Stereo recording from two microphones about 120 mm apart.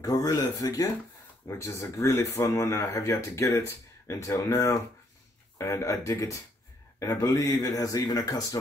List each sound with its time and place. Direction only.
0.0 s speech: 30° left (ahead or behind)